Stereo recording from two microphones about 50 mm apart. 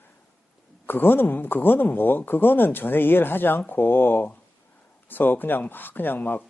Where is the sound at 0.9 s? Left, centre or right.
Left.